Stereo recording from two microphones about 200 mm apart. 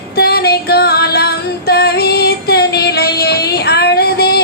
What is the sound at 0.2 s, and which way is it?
Female singing, 50° left (ahead or behind).